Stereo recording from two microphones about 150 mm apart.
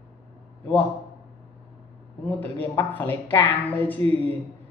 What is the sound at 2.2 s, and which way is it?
A woman's voice, 10° left (ahead or behind).